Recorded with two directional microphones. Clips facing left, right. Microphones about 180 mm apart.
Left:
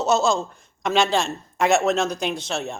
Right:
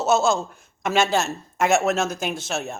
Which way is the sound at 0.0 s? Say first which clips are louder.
Even; centre (ahead or behind).